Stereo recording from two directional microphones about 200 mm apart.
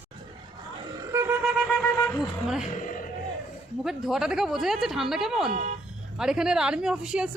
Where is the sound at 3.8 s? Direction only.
Centre (ahead or behind).